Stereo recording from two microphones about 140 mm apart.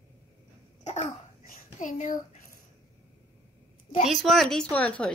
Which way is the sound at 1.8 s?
65° left (ahead or behind).